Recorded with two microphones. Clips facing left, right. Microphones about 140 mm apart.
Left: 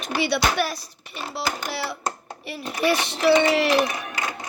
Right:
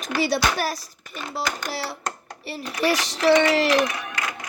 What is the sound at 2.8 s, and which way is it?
Speech, 40° right (ahead or behind).